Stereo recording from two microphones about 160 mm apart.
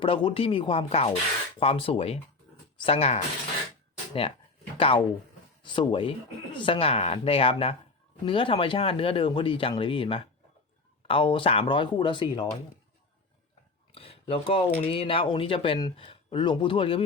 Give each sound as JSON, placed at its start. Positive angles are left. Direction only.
{"t": 0.0, "sound": "speech", "side_deg": 35}
{"t": 4.8, "sound": "speech", "side_deg": 35}
{"t": 13.9, "sound": "speech", "side_deg": 35}